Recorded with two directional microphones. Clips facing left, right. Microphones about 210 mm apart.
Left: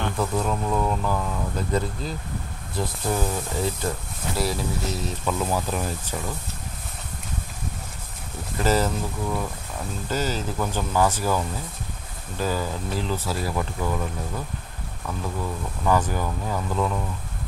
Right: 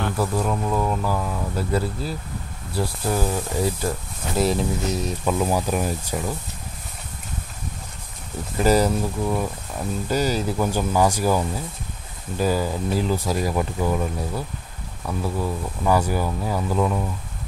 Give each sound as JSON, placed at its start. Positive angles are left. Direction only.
{"t": 0.0, "sound": "speech", "side_deg": -5}
{"t": 4.4, "sound": "speech", "side_deg": -20}
{"t": 8.5, "sound": "speech", "side_deg": -15}
{"t": 10.0, "sound": "speech", "side_deg": -10}